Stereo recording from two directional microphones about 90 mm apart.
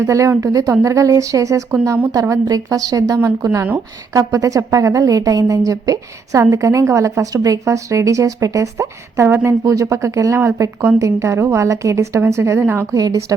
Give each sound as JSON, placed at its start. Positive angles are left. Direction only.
{"t": 0.0, "sound": "a woman's voice", "side_deg": -30}
{"t": 12.9, "sound": "a woman's voice", "side_deg": -40}